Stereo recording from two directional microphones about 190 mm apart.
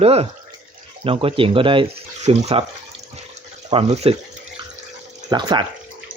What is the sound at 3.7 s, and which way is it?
Speech, 30° right (ahead or behind).